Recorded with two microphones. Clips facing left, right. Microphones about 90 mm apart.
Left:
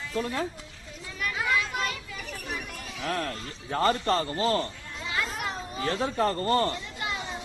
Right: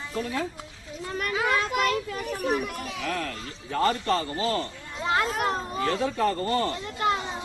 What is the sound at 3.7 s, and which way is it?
Speech, 35° left (ahead or behind).